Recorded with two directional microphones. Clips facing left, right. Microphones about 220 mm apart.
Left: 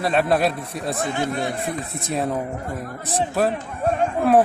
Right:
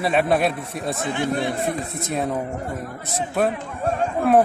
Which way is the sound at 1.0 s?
45° left (ahead or behind).